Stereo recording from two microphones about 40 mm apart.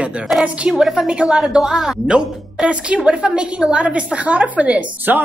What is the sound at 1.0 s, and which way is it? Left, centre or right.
A woman's voice, right.